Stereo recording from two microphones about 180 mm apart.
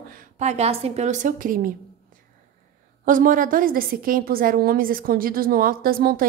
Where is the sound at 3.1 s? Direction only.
50° right (ahead or behind).